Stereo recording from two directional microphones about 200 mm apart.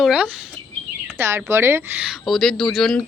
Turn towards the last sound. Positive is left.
turn(degrees=0)  # may be behind; listen again after turning